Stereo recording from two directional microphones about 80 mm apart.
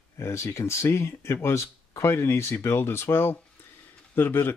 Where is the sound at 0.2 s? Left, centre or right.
Left.